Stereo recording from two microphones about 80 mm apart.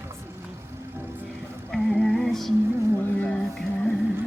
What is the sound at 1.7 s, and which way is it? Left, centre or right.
Music, centre.